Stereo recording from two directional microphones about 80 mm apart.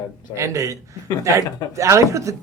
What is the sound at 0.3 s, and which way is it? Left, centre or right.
A man's voice, right.